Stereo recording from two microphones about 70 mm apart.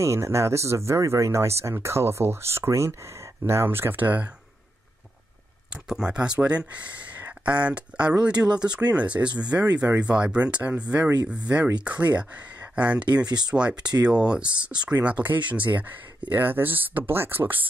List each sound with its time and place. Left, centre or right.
0.0 s speech: right
5.9 s speech: centre; by 17.6 s right